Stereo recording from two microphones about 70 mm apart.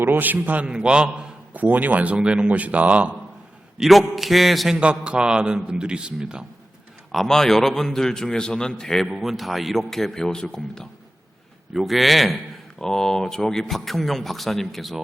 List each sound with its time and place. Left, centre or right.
0.0 s a man's voice: right
1.5 s speech: right
3.8 s speech: centre
4.8 s a man's voice: centre
7.1 s a man's voice: centre